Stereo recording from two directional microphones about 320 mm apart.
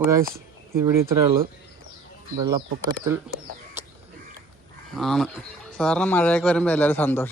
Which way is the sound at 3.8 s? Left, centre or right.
Centre.